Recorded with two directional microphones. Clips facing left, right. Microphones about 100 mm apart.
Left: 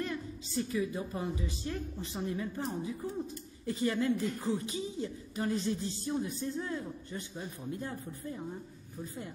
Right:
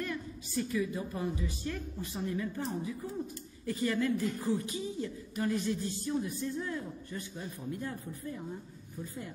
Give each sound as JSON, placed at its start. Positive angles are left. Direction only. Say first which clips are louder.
{"t": 0.0, "sound": "speech", "louder": "left 1 dB", "side_deg": 25}